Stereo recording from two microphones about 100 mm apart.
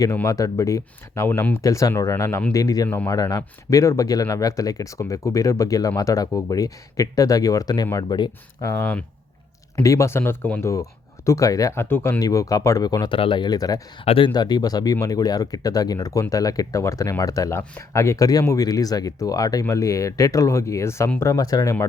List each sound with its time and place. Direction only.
0.3 s speech: 35° left (ahead or behind)
1.3 s speech: 20° left (ahead or behind)
1.6 s speech: 35° left (ahead or behind)
8.6 s speech: 25° left (ahead or behind)
9.8 s speech: 30° left (ahead or behind)
12.2 s speech: 35° left (ahead or behind)
13.1 s speech: 60° left (ahead or behind); by 13.8 s 40° left (ahead or behind)
14.0 s speech: 75° left (ahead or behind)
14.3 s speech: 45° left (ahead or behind)